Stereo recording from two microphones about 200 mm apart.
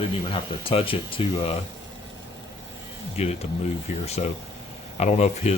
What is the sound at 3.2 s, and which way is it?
Speech, 30° left (ahead or behind).